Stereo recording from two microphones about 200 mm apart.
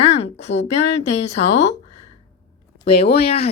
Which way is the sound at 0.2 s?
30° left (ahead or behind).